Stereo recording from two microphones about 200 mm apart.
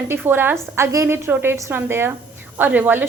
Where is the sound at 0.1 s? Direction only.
10° right (ahead or behind).